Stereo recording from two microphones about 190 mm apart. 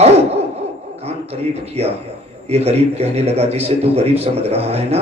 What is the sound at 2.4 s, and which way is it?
A man's voice, 35° right (ahead or behind).